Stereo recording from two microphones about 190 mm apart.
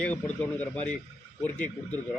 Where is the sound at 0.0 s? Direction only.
10° left (ahead or behind).